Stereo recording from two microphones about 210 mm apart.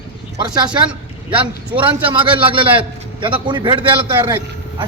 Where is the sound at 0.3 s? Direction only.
20° right (ahead or behind).